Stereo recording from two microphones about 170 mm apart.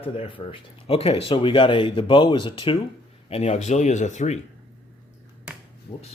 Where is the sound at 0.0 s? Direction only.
30° left (ahead or behind).